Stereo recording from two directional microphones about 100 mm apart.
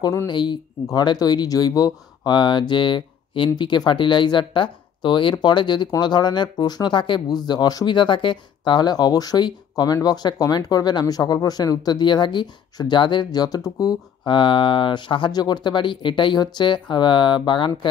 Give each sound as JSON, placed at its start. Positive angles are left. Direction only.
{"t": 0.0, "sound": "speech", "side_deg": 35}
{"t": 0.3, "sound": "speech", "side_deg": 50}
{"t": 14.2, "sound": "speech", "side_deg": 55}